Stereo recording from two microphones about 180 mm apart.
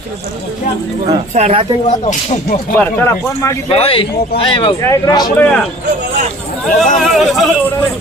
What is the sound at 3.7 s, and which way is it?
Speech, 30° left (ahead or behind).